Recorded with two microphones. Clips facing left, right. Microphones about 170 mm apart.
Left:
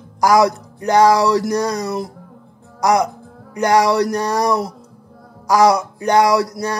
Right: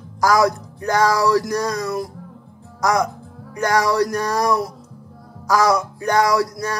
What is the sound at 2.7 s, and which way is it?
Speech, 20° left (ahead or behind).